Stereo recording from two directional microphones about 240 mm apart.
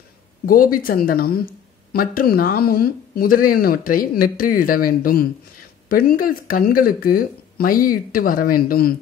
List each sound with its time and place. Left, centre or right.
0.5 s speech: left